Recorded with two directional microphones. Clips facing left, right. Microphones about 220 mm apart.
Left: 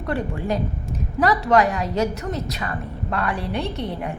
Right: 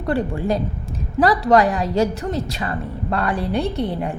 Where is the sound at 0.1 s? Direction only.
30° right (ahead or behind).